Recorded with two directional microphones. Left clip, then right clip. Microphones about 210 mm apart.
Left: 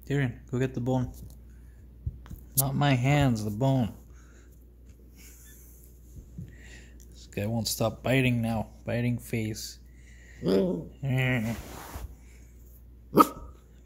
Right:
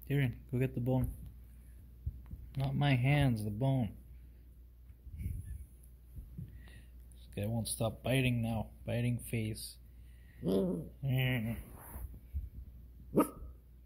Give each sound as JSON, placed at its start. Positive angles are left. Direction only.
{"t": 0.0, "sound": "speech", "side_deg": 0}
{"t": 2.5, "sound": "speech", "side_deg": 10}
{"t": 7.2, "sound": "speech", "side_deg": 5}
{"t": 10.4, "sound": "speech", "side_deg": 20}
{"t": 10.7, "sound": "speech", "side_deg": 5}